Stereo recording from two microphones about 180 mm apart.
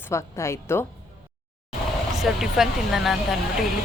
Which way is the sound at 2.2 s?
Centre (ahead or behind).